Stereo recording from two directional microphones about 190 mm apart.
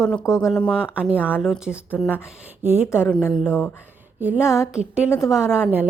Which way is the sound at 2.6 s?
10° right (ahead or behind).